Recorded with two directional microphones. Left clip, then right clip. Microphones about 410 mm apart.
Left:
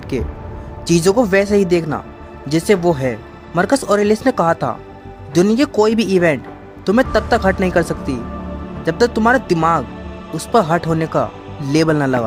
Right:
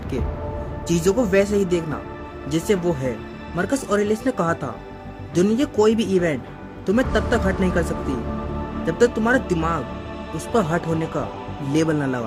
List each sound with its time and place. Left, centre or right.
0.1 s speech: centre